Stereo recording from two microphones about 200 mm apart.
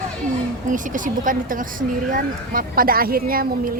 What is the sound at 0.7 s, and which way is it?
A woman's voice, 40° right (ahead or behind).